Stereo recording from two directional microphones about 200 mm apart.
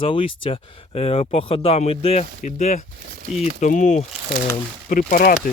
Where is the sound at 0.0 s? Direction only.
25° left (ahead or behind).